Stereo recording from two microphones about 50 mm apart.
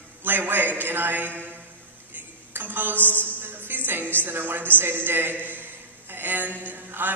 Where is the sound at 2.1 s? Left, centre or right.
Right.